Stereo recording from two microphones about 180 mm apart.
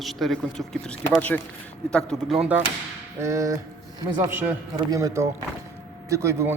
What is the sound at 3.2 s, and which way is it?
A man's voice, 15° right (ahead or behind).